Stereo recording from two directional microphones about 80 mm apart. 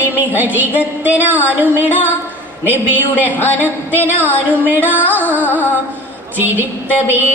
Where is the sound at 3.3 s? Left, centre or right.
Left.